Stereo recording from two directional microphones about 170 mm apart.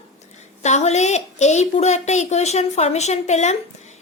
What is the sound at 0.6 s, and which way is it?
A woman's voice, 40° left (ahead or behind).